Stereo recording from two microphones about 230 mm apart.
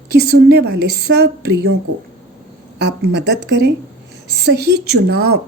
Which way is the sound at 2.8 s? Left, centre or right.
Right.